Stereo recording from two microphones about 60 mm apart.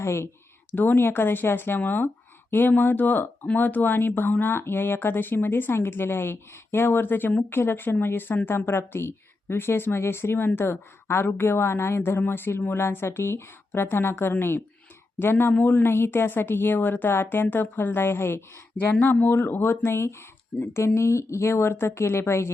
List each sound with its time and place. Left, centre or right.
0.0 s speech: left
0.7 s speech: left